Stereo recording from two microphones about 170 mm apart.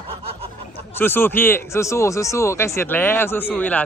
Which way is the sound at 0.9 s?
10° left (ahead or behind).